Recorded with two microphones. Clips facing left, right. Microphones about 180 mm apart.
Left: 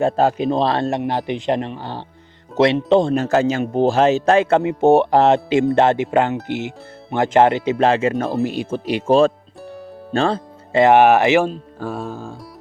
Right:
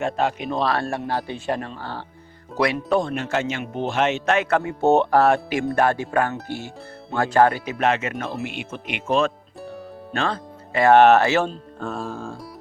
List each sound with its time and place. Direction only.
0.0 s speech: 35° left (ahead or behind)
3.2 s speech: 40° left (ahead or behind)
10.1 s music: 30° left (ahead or behind)
10.9 s speech: 10° left (ahead or behind)